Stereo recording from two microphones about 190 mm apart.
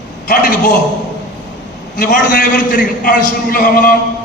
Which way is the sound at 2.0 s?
45° left (ahead or behind).